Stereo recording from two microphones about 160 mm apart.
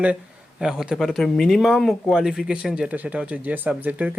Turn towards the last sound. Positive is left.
turn(degrees=-10)  # may be behind; listen again after turning